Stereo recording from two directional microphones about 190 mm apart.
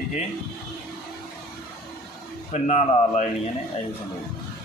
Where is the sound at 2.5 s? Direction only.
40° left (ahead or behind).